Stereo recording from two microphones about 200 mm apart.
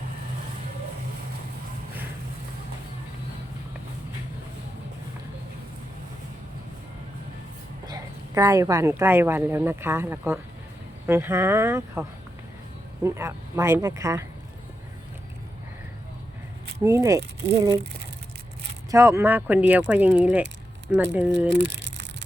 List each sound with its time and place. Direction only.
7.9 s speech: 15° right (ahead or behind)
13.1 s speech: 15° right (ahead or behind)
16.8 s speech: 15° right (ahead or behind)
18.9 s speech: 15° right (ahead or behind)
21.5 s a sound: 65° right (ahead or behind)